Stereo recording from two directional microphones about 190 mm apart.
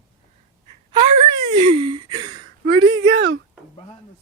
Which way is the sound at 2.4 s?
90° right.